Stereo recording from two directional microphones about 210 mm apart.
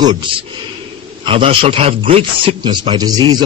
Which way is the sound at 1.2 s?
25° right (ahead or behind).